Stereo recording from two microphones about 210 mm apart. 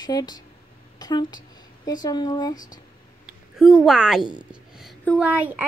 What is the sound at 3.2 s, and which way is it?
A woman's voice, centre (ahead or behind).